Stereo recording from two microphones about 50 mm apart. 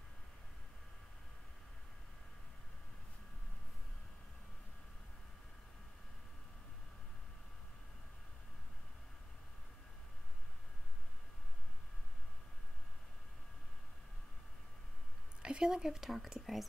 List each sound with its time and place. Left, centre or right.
15.4 s speech: centre